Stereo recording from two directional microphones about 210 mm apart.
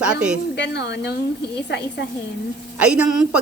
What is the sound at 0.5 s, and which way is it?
Speech, 55° left (ahead or behind).